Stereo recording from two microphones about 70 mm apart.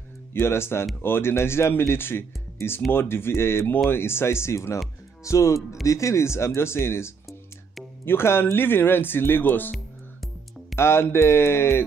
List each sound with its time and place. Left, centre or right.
0.3 s speech: left
10.8 s speech: left